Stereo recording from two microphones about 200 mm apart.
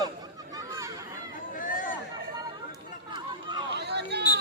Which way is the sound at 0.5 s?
15° right (ahead or behind).